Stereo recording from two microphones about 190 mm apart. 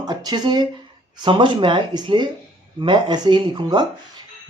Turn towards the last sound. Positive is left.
turn(degrees=-25)  # may be behind; listen again after turning